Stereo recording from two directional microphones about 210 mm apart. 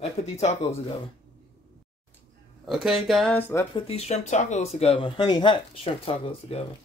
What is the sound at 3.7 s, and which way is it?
Speech, 30° left (ahead or behind).